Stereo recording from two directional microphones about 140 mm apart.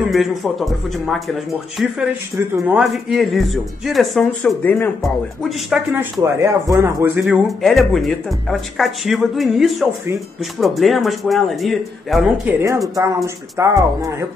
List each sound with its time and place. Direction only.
0.1 s speech: centre (ahead or behind)
2.3 s a man's voice: 15° right (ahead or behind)
2.8 s speech: centre (ahead or behind)
6.2 s a man's voice: 20° right (ahead or behind)
7.4 s speech: centre (ahead or behind)
12.4 s speech: 20° right (ahead or behind)